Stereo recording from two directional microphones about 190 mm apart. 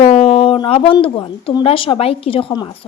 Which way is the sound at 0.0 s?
35° left (ahead or behind).